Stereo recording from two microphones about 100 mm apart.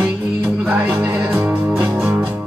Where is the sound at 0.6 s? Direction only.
20° right (ahead or behind).